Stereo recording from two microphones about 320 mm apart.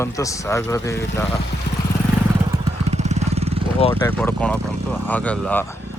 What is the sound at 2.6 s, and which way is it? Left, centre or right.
Vehicle, right.